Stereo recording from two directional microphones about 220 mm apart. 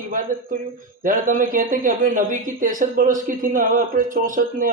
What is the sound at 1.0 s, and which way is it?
A man's voice, 40° right (ahead or behind).